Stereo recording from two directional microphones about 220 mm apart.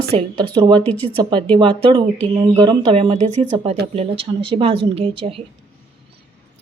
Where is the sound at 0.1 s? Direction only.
25° right (ahead or behind).